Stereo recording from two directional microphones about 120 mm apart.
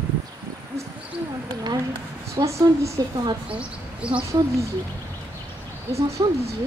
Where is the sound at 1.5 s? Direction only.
35° right (ahead or behind).